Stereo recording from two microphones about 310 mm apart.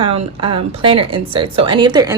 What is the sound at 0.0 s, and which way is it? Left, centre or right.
Speech, centre.